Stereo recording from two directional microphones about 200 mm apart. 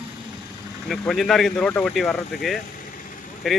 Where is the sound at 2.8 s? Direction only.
40° left (ahead or behind).